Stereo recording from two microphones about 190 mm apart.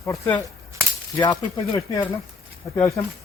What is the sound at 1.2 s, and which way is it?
Speech, 25° left (ahead or behind).